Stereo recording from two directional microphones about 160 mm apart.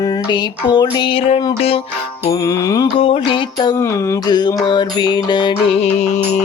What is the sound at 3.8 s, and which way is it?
Mantra, 15° left (ahead or behind).